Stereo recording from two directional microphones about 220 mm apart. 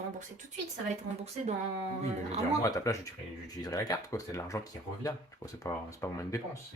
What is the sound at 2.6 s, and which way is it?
Speech, 15° left (ahead or behind).